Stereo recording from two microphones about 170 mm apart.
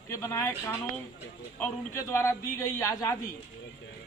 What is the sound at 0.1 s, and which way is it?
A man's voice, 20° left (ahead or behind).